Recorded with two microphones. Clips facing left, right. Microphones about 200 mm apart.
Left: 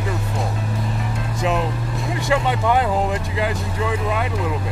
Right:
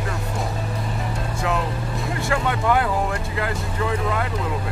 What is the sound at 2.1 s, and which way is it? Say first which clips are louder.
Speech: left 4 dB; 20° left (ahead or behind).